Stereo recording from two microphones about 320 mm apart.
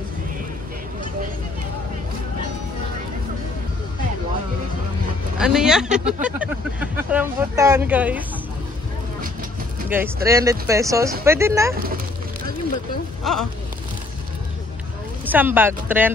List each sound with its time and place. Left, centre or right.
5.4 s speech: centre
9.8 s speech: centre
11.7 s speech: right
13.2 s speech: centre
15.2 s speech: centre